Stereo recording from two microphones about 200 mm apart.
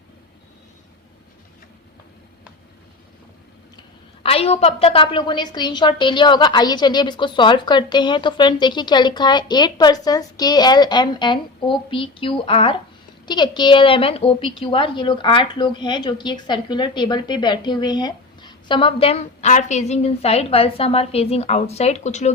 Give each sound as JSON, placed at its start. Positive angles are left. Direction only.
{"t": 3.8, "sound": "a woman's voice", "side_deg": 30}